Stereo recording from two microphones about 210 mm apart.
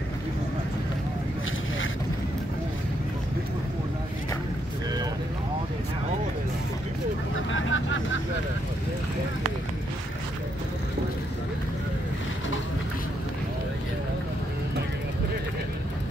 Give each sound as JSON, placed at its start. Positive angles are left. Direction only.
{"t": 7.5, "sound": "vehicle", "side_deg": 70}